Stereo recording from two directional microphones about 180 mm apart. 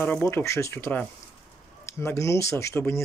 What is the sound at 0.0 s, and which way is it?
Speech, 10° left (ahead or behind).